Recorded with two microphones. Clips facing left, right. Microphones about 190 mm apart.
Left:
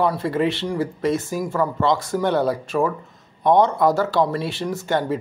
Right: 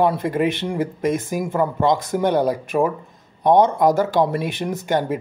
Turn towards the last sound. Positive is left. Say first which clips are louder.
# right 1 dB
turn(degrees=-15)  # may be behind; listen again after turning